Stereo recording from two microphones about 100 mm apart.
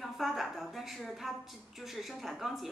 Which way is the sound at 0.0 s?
Centre (ahead or behind).